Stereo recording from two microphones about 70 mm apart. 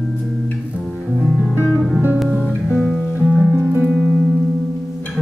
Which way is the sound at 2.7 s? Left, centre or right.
Centre.